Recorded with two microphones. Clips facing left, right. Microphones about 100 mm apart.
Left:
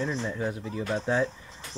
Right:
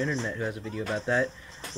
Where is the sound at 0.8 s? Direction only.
15° left (ahead or behind).